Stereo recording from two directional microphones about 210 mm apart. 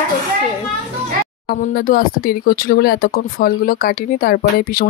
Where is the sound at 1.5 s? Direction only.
45° left (ahead or behind).